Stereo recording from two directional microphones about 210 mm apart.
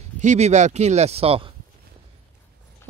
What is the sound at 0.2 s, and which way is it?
Speech, 35° right (ahead or behind).